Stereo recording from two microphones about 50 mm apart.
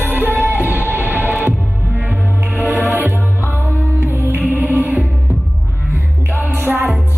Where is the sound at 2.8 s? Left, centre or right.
Right.